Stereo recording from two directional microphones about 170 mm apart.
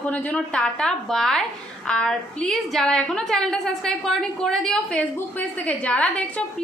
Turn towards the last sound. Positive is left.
turn(degrees=5)  # may be behind; listen again after turning